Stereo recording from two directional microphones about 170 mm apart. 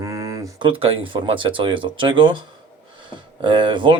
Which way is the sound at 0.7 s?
35° right (ahead or behind).